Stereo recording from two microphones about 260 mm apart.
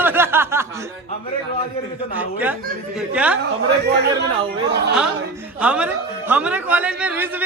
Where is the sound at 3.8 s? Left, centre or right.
Right.